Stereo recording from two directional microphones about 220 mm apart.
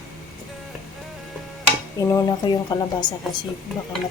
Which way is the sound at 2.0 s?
15° left (ahead or behind).